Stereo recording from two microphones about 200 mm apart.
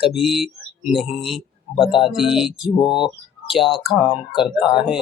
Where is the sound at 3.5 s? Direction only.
Centre (ahead or behind).